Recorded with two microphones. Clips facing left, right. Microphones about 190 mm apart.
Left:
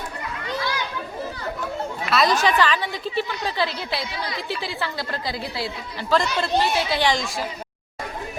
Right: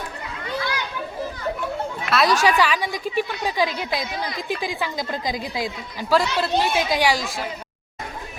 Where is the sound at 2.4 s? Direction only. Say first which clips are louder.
Right 1 dB; 10° right (ahead or behind).